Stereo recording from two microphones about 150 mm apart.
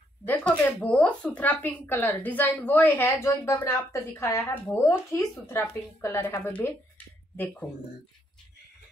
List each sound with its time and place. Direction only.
0.2 s speech: 10° left (ahead or behind)